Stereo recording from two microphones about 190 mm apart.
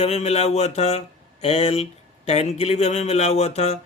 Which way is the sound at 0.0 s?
35° left (ahead or behind).